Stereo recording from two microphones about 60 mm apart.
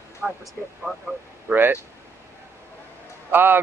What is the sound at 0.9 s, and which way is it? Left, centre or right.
Speech, centre.